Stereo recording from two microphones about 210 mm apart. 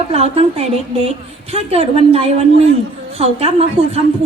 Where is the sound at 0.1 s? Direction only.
30° right (ahead or behind).